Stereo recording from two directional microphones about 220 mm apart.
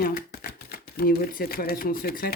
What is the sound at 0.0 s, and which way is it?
Shuffling cards, 40° left (ahead or behind).